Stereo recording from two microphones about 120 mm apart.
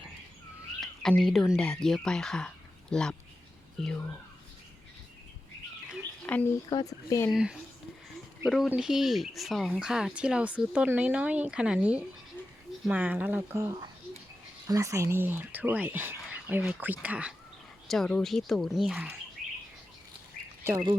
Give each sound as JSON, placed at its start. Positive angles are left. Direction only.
{"t": 0.8, "sound": "speech", "side_deg": 5}
{"t": 6.3, "sound": "speech", "side_deg": 10}
{"t": 6.7, "sound": "speech", "side_deg": 30}
{"t": 7.3, "sound": "speech", "side_deg": -5}
{"t": 17.8, "sound": "speech", "side_deg": 5}